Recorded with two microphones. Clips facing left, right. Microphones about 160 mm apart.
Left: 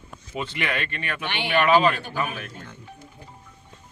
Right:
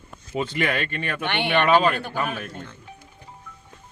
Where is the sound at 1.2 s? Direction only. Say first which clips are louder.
Right 1 dB; 60° right (ahead or behind).